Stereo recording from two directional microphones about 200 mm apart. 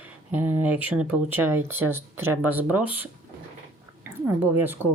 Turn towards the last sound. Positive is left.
turn(degrees=-10)  # may be behind; listen again after turning